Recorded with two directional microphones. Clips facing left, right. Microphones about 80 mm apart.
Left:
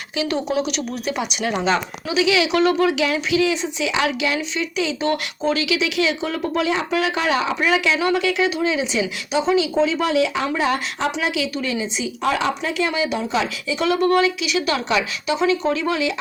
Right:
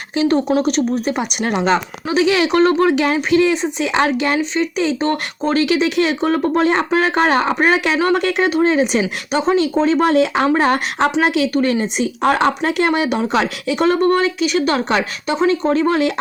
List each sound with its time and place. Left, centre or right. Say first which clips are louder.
0.2 s speech: right 6 dB; right